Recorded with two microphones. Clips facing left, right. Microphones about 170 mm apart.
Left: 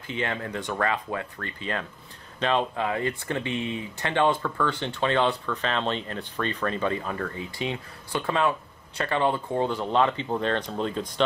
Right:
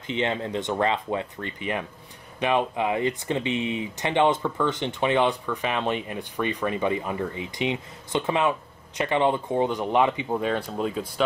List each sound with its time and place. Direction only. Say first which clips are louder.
0.0 s speech: right 4 dB; 20° right (ahead or behind); by 11.2 s 5° right (ahead or behind)